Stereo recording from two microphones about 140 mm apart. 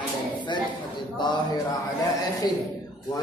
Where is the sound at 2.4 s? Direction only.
30° left (ahead or behind).